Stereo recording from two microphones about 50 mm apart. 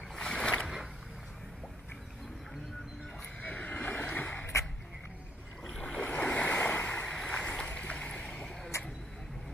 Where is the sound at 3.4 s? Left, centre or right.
Left.